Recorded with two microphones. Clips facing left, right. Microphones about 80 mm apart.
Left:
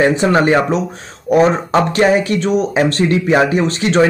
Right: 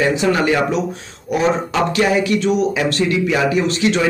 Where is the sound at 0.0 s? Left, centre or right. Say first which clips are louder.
Left 4 dB; left.